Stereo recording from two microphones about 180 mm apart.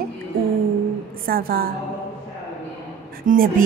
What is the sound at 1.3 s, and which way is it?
Speech, 55° right (ahead or behind).